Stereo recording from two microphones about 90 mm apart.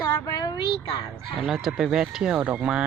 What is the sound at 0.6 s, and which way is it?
Speech, 90° left.